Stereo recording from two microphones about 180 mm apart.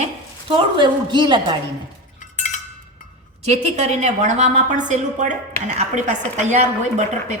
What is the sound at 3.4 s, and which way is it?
A woman's voice, 40° right (ahead or behind).